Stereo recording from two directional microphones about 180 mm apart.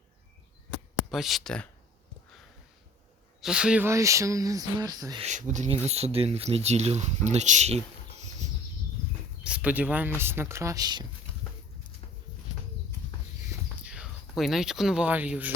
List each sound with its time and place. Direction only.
1.1 s speech: centre (ahead or behind)
3.4 s speech: 5° right (ahead or behind)
5.2 s speech: 40° right (ahead or behind)
9.4 s speech: 5° right (ahead or behind); by 11.0 s 20° right (ahead or behind)
13.8 s speech: 5° right (ahead or behind)